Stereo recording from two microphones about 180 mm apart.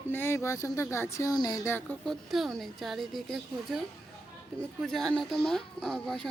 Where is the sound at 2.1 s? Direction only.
Centre (ahead or behind).